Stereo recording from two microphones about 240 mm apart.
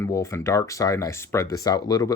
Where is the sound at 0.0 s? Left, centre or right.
Centre.